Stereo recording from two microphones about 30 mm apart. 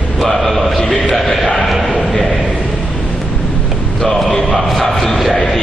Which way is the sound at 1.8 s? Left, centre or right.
Centre.